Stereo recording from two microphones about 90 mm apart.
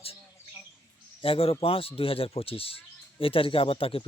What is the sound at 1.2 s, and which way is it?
A man's voice, 90° left.